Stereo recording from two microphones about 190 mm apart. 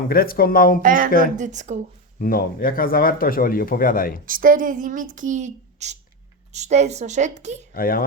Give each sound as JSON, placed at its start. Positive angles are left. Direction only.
{"t": 0.1, "sound": "speech", "side_deg": 50}
{"t": 0.8, "sound": "a woman's voice", "side_deg": -45}
{"t": 2.1, "sound": "speech", "side_deg": 50}
{"t": 4.3, "sound": "a woman's voice", "side_deg": -45}
{"t": 7.7, "sound": "speech", "side_deg": 50}